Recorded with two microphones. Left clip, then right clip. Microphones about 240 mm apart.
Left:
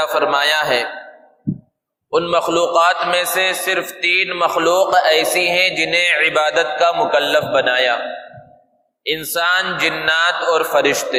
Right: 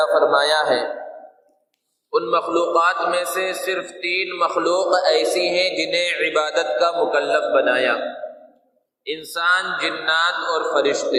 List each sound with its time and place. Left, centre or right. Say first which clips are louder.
0.3 s a sound: left 1 dB; left
0.5 s a man's voice: left 1 dB; left
2.0 s a man's voice: left 3 dB; left
9.0 s a man's voice: left 2 dB; left